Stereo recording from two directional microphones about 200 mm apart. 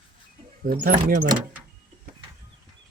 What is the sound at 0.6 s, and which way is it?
Speech, 45° right (ahead or behind).